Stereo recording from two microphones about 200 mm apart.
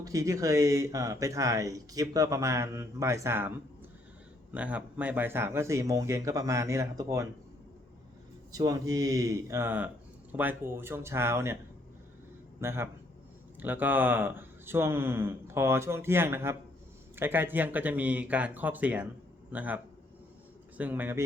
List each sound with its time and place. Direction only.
0.0 s speech: 15° right (ahead or behind)
4.5 s speech: 5° right (ahead or behind)
8.5 s speech: 20° right (ahead or behind)
12.5 s speech: 10° right (ahead or behind)